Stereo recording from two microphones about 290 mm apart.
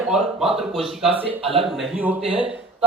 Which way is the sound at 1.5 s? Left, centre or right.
Centre.